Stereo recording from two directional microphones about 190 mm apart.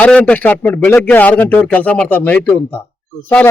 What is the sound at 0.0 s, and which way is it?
A man's voice, 5° left (ahead or behind).